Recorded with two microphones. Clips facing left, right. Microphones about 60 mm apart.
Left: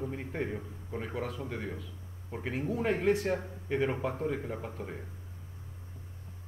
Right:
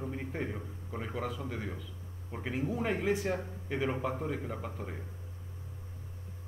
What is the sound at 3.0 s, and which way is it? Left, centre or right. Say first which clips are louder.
Speech: left 4 dB; left.